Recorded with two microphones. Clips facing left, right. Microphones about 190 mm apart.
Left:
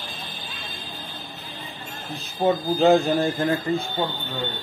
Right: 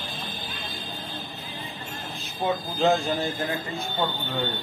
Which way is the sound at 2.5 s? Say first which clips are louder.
Left 5 dB; 50° left (ahead or behind).